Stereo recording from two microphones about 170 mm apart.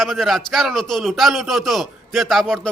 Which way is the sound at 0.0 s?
Centre (ahead or behind).